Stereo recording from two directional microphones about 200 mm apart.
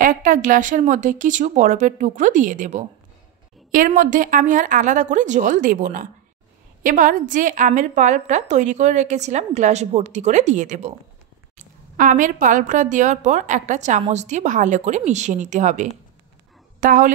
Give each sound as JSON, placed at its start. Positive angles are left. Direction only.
{"t": 0.0, "sound": "a woman's voice", "side_deg": -45}